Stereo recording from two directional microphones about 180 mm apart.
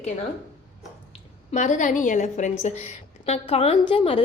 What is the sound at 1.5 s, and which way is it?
A woman's voice, 45° left (ahead or behind).